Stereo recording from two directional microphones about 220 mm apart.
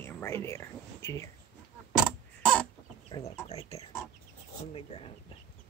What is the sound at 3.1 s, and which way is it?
Speech, 20° left (ahead or behind).